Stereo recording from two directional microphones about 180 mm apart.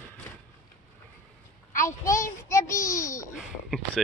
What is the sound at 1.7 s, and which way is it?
Speech, 15° left (ahead or behind).